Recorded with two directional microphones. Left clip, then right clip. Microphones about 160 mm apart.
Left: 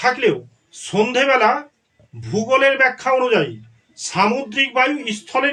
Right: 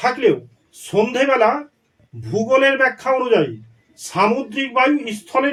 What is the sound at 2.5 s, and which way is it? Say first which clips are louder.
A man's voice: even; 50° right (ahead or behind).